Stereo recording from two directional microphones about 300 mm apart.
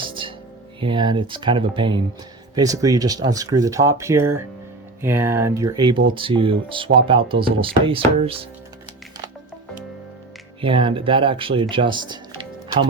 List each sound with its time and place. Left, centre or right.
0.8 s speech: centre
10.6 s speech: centre